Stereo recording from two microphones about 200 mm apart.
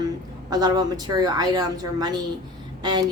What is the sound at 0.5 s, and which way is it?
Speech, 20° right (ahead or behind).